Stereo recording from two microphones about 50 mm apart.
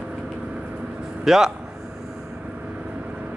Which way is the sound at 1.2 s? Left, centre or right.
Centre.